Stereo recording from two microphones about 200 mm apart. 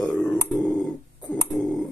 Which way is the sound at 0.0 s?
5° left (ahead or behind).